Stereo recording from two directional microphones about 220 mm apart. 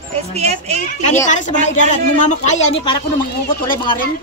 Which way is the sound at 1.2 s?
35° left (ahead or behind).